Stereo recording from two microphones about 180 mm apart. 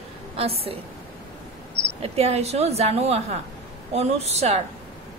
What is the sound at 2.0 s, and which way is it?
Speech, 35° right (ahead or behind).